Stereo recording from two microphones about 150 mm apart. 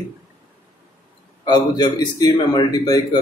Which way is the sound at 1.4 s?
30° left (ahead or behind).